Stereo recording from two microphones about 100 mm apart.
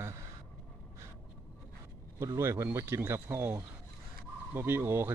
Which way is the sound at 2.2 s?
30° right (ahead or behind).